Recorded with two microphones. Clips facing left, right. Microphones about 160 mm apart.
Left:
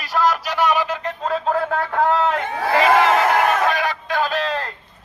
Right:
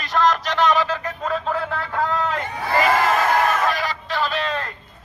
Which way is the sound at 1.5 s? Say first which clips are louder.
Left 4 dB; 50° left (ahead or behind).